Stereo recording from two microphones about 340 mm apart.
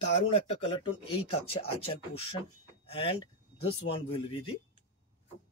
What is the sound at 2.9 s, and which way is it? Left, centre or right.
Speech, centre.